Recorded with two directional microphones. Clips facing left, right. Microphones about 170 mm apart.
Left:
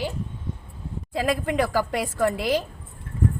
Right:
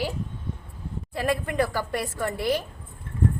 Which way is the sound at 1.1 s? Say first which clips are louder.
Left 2 dB; 90° left.